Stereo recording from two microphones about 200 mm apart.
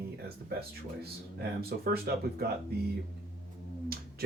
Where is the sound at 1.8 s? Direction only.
50° right (ahead or behind).